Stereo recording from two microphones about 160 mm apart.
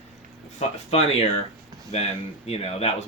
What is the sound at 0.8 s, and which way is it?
Speech, 40° left (ahead or behind).